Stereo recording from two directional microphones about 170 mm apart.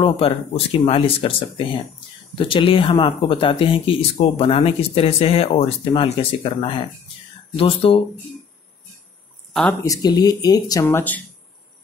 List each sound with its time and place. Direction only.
0.0 s speech: 35° left (ahead or behind)
9.5 s speech: 5° left (ahead or behind)
9.8 s speech: 20° left (ahead or behind)